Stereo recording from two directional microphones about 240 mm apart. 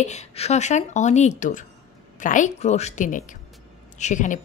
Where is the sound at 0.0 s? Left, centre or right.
Left.